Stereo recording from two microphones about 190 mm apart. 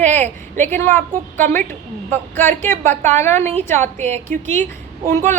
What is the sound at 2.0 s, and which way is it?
A woman's voice, 10° left (ahead or behind).